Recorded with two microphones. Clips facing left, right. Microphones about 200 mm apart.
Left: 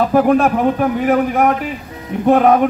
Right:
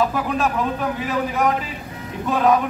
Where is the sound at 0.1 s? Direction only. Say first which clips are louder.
Left 10 dB; 60° left (ahead or behind).